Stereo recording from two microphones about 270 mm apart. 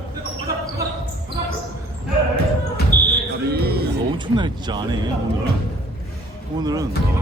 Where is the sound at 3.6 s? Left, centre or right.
Right.